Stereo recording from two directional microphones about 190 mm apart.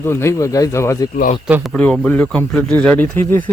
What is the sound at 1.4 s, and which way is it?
A man's voice, centre (ahead or behind).